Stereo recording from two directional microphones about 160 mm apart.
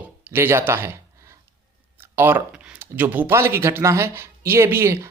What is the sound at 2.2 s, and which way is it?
Speech, 15° right (ahead or behind).